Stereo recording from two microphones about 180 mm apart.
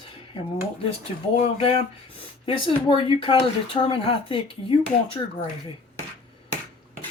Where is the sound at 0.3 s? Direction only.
30° left (ahead or behind).